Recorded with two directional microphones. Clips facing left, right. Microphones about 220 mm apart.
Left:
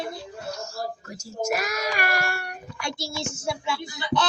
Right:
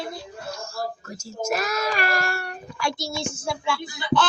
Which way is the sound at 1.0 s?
15° left (ahead or behind).